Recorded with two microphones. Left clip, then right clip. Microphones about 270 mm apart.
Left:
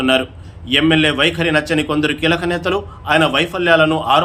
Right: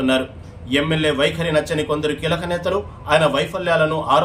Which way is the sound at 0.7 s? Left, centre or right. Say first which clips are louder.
Left 5 dB; centre.